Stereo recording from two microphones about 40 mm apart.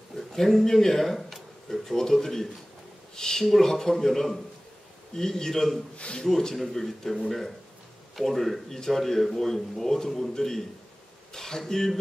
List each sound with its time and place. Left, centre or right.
0.1 s a man's voice: centre
5.9 s speech: left
6.5 s a man's voice: centre